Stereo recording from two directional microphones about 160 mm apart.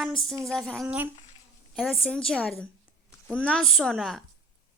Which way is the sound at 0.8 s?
10° right (ahead or behind).